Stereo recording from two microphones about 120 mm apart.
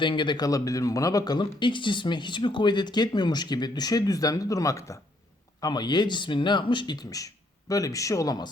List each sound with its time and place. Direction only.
0.0 s speech: 45° left (ahead or behind)